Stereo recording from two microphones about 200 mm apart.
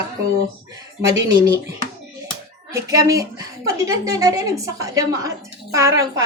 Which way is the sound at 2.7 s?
15° right (ahead or behind).